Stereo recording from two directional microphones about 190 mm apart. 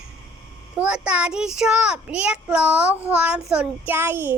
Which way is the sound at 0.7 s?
5° right (ahead or behind).